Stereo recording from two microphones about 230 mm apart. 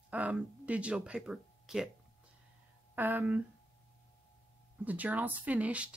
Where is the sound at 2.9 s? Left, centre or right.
Centre.